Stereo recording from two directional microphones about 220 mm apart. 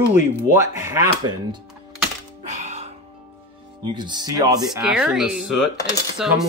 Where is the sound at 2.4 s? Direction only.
30° right (ahead or behind).